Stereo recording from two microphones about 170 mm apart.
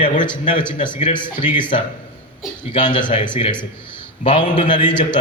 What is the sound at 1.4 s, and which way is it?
A man's voice, 30° left (ahead or behind).